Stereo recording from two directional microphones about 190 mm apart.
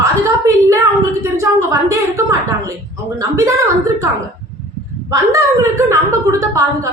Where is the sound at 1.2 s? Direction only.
15° right (ahead or behind).